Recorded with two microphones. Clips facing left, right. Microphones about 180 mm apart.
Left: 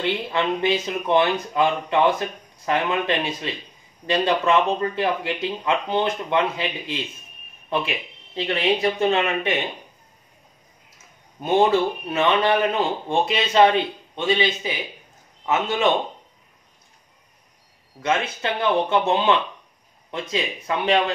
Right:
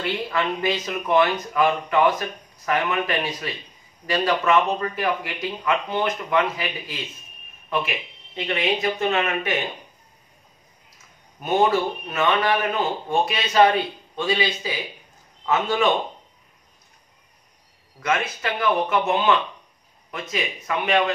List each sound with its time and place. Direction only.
0.0 s speech: 25° left (ahead or behind)
9.0 s speech: 30° left (ahead or behind)
11.3 s speech: 25° left (ahead or behind)
18.0 s speech: 25° left (ahead or behind)